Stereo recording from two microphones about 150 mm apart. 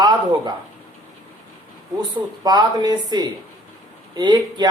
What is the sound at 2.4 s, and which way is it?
Speech, 25° right (ahead or behind).